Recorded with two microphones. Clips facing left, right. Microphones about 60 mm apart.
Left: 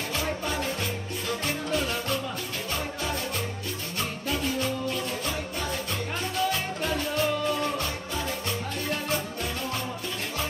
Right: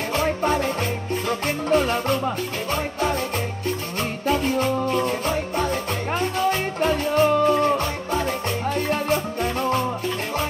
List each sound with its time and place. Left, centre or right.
0.1 s music: right
1.7 s music: right
4.3 s music: right